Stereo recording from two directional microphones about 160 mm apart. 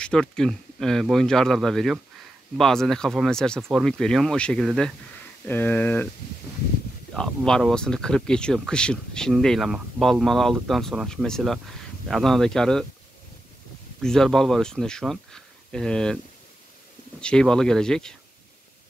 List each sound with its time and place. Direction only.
0.0 s speech: 5° left (ahead or behind)
7.2 s speech: 5° left (ahead or behind)
14.0 s speech: 5° left (ahead or behind)
17.2 s speech: 5° left (ahead or behind)